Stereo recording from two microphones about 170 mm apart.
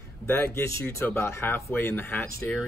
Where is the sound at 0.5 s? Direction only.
15° left (ahead or behind).